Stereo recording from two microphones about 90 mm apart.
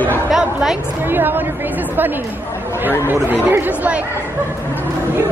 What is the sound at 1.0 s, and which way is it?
Speech, 20° right (ahead or behind).